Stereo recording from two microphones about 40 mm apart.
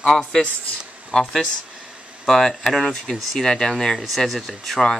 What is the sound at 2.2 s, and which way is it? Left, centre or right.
Speech, centre.